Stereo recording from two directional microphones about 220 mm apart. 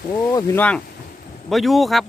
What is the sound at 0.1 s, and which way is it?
Speech, 10° left (ahead or behind).